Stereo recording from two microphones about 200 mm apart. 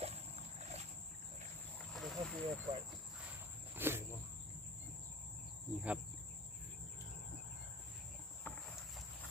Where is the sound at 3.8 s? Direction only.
10° right (ahead or behind).